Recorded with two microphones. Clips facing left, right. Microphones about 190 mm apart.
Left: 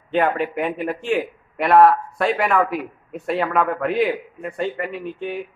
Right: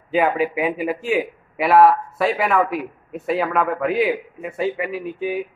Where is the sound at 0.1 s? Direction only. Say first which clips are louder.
Right 1 dB; 5° right (ahead or behind).